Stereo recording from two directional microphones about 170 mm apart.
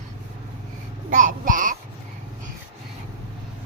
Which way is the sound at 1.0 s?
50° right (ahead or behind).